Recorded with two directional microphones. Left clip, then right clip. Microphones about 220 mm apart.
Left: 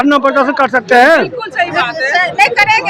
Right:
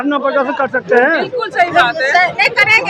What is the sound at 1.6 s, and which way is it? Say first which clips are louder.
Speech: right 2 dB; centre (ahead or behind).